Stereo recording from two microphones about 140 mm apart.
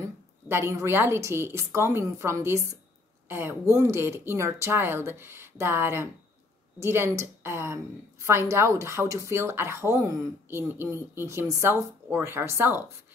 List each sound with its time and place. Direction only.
0.0 s a woman's voice: 20° right (ahead or behind)